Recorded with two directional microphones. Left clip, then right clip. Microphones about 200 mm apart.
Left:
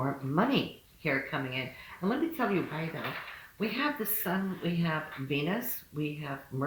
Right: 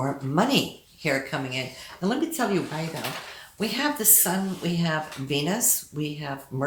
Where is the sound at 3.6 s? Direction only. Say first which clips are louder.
Right 5 dB; 35° right (ahead or behind).